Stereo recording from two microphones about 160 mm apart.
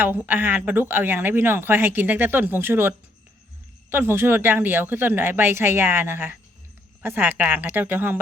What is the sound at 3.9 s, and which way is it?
Speech, 15° right (ahead or behind).